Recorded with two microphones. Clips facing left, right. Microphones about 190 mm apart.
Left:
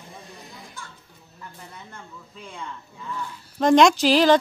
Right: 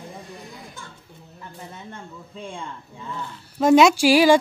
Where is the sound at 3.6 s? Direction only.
5° right (ahead or behind).